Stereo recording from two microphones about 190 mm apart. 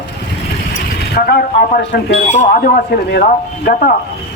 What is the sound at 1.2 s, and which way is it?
Speech, 60° left (ahead or behind).